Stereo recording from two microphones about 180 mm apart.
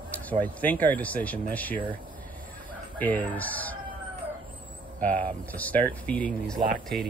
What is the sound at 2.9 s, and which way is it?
Speech, 10° left (ahead or behind).